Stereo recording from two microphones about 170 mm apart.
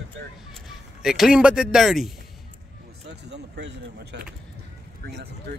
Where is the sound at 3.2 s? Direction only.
90° right.